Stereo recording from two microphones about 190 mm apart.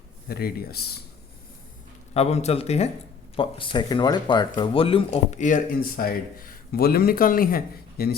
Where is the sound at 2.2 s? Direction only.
35° left (ahead or behind).